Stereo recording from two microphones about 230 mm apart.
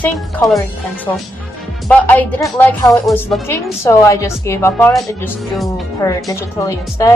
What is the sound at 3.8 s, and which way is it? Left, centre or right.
Speech, centre.